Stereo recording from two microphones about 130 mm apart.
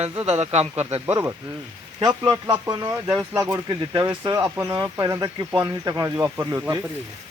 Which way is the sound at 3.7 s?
35° right (ahead or behind).